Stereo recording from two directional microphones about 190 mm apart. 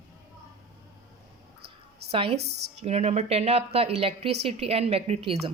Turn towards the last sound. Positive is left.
turn(degrees=-30)  # may be behind; listen again after turning